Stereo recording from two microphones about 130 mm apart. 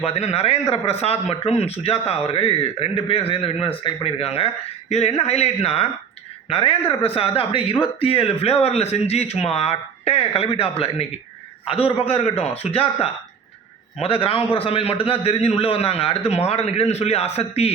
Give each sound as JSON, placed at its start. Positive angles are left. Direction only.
{"t": 0.0, "sound": "a man's voice", "side_deg": 55}